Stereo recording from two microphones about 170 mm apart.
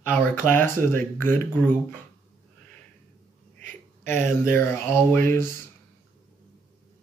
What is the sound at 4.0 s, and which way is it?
Speech, 15° left (ahead or behind).